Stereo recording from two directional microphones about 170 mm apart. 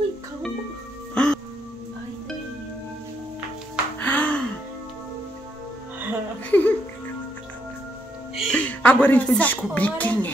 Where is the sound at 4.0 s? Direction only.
10° left (ahead or behind).